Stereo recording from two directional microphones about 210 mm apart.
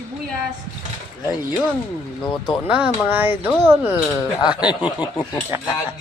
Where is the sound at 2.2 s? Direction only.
20° left (ahead or behind).